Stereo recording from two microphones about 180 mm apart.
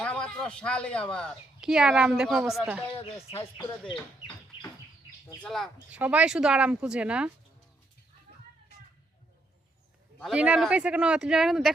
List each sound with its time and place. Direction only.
0.0 s speech: 5° left (ahead or behind)
2.8 s speech: 30° left (ahead or behind)
3.6 s speech: 20° left (ahead or behind)
4.5 s bird: 30° left (ahead or behind)
5.4 s speech: centre (ahead or behind)
10.2 s speech: 5° right (ahead or behind)